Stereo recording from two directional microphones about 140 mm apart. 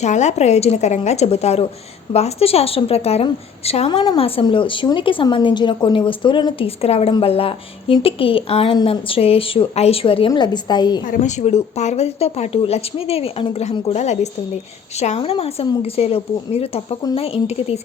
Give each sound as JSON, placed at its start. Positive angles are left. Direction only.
{"t": 0.0, "sound": "a woman's voice", "side_deg": 55}
{"t": 11.1, "sound": "speech", "side_deg": 55}